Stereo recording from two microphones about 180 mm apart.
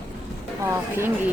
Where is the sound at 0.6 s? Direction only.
15° right (ahead or behind).